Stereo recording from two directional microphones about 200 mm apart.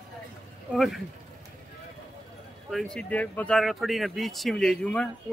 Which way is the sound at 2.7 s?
Centre (ahead or behind).